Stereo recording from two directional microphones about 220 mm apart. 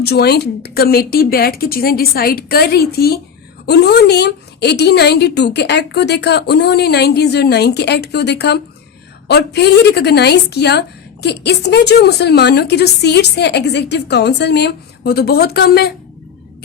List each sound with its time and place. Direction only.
0.0 s a woman's voice: 45° left (ahead or behind)